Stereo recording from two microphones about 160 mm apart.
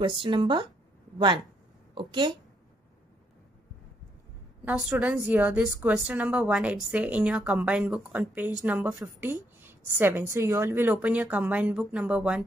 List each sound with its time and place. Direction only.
0.0 s a woman's voice: 30° right (ahead or behind)
4.6 s a woman's voice: 5° right (ahead or behind)